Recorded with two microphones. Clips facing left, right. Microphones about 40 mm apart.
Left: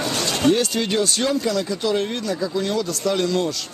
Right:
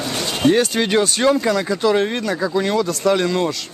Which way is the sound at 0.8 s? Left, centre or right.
Right.